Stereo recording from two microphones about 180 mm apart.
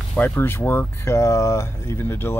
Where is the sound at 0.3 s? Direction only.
15° left (ahead or behind).